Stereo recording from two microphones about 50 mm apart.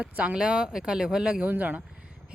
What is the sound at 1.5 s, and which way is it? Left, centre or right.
Speech, right.